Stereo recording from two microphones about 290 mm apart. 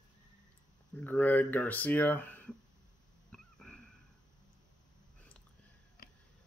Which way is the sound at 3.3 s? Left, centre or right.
Centre.